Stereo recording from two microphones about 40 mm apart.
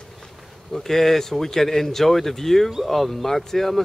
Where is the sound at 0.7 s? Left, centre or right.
Centre.